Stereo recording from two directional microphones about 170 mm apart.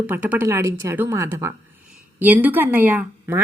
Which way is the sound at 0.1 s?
10° right (ahead or behind).